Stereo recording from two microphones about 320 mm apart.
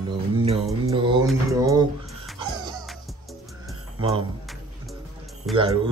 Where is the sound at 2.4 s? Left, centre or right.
Centre.